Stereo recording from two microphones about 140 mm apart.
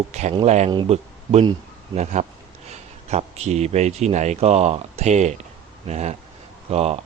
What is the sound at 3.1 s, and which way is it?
Speech, 50° right (ahead or behind).